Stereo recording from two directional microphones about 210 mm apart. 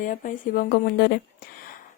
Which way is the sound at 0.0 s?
40° left (ahead or behind).